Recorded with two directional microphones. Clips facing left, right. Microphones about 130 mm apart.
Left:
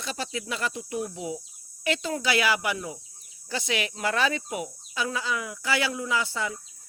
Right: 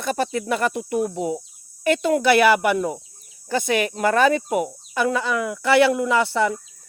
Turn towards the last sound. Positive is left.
turn(degrees=-60)  # may be behind; listen again after turning